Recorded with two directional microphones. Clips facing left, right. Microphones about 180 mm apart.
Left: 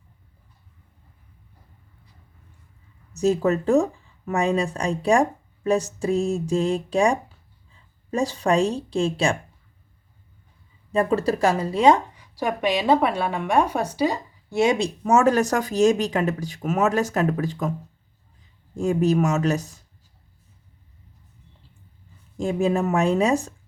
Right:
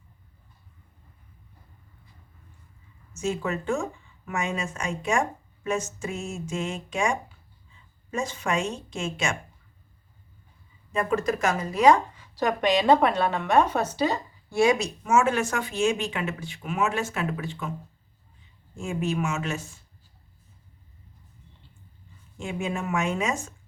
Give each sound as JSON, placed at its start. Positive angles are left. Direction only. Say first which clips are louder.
{"t": 3.1, "sound": "speech", "louder": "left 8 dB", "side_deg": 35}
{"t": 10.9, "sound": "speech", "louder": "left 4 dB", "side_deg": 35}
{"t": 12.1, "sound": "a woman's voice", "louder": "even", "side_deg": 15}
{"t": 14.6, "sound": "speech", "louder": "left 1 dB", "side_deg": 25}
{"t": 22.4, "sound": "speech", "louder": "left 9 dB", "side_deg": 35}